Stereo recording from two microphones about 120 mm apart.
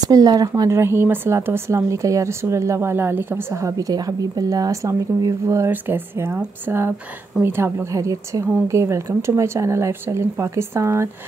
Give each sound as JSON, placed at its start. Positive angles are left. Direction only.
{"t": 0.0, "sound": "a woman's voice", "side_deg": -30}